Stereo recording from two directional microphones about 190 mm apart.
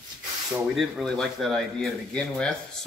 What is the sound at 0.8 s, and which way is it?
Speech, centre (ahead or behind).